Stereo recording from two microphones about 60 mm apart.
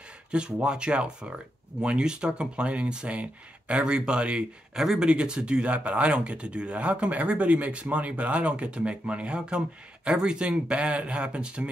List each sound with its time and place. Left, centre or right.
0.3 s speech: centre